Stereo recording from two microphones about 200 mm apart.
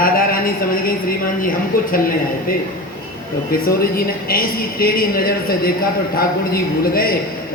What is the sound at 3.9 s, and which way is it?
A woman's voice, 45° left (ahead or behind).